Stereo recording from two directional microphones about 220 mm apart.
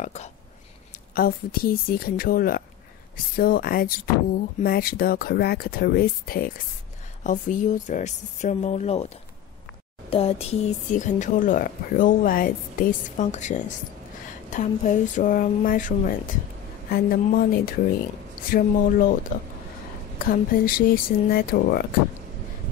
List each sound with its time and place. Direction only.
0.0 s speech: 30° left (ahead or behind)
1.1 s speech: 40° left (ahead or behind)
20.2 s speech: 40° left (ahead or behind)